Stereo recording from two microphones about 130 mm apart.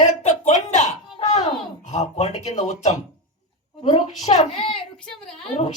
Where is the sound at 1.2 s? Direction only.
60° left (ahead or behind).